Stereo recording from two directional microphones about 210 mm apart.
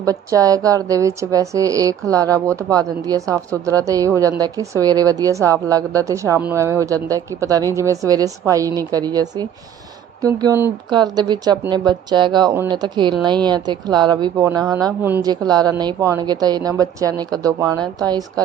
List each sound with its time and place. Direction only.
0.0 s a woman's voice: 15° right (ahead or behind)